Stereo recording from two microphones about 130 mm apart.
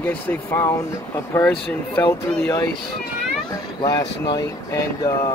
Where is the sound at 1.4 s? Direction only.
10° left (ahead or behind).